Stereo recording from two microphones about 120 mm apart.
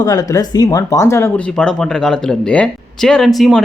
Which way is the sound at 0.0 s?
35° left (ahead or behind).